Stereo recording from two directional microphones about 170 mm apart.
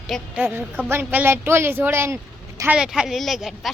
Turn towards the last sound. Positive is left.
turn(degrees=0)  # may be behind; listen again after turning